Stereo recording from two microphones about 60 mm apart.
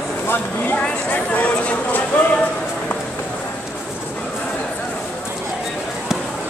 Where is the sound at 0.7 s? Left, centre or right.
Left.